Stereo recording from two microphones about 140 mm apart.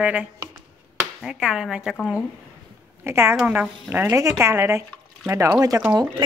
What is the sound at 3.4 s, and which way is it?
Speech, 5° right (ahead or behind).